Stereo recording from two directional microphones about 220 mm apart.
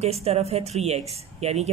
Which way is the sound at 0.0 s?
30° right (ahead or behind).